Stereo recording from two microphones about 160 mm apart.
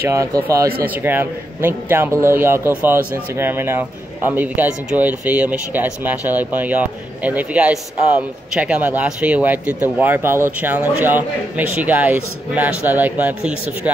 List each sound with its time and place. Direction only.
0.1 s a man's voice: 15° right (ahead or behind)